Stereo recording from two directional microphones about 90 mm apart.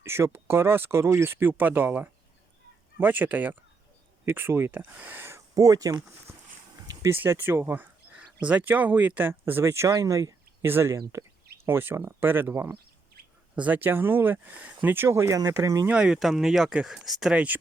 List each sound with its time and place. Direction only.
0.0 s speech: 30° right (ahead or behind)
7.0 s speech: 25° right (ahead or behind)
15.9 s speech: 10° right (ahead or behind)